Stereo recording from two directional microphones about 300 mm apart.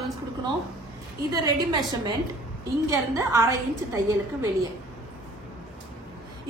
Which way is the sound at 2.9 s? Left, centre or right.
Centre.